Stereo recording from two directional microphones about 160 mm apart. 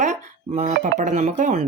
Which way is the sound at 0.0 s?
45° right (ahead or behind).